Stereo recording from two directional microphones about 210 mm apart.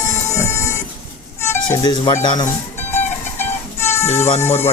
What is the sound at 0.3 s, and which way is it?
Music, 15° left (ahead or behind).